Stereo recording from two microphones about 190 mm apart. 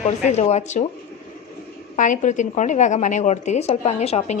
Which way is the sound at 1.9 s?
40° left (ahead or behind).